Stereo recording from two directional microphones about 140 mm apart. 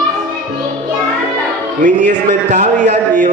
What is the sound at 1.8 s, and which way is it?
A man's voice, 65° right (ahead or behind).